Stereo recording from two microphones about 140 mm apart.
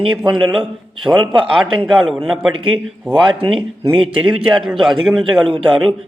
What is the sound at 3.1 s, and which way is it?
Speech, 35° right (ahead or behind).